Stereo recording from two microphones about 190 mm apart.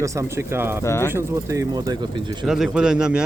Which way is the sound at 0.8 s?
15° left (ahead or behind).